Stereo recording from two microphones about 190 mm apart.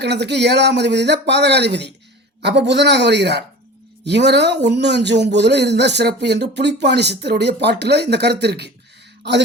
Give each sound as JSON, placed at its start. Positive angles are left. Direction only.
{"t": 0.0, "sound": "speech", "side_deg": -60}